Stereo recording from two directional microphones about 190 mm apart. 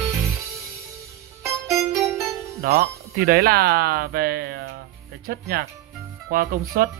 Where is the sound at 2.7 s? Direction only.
50° right (ahead or behind).